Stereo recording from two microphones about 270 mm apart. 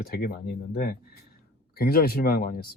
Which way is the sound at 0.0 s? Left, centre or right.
Left.